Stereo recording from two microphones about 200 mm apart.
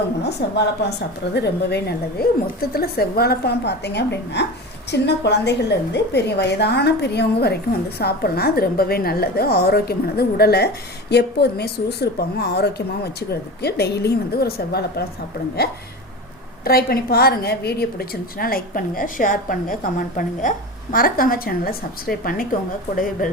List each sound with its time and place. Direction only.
0.2 s a woman's voice: 55° left (ahead or behind)
16.6 s a woman's voice: 50° left (ahead or behind)